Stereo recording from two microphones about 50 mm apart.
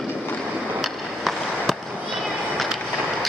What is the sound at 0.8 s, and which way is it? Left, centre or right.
Skateboard, centre.